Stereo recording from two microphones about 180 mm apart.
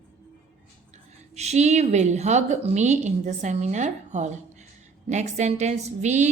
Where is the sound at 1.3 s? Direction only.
35° right (ahead or behind).